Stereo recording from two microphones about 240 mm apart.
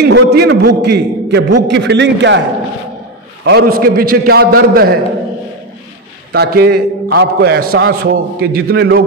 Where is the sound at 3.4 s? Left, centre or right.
Right.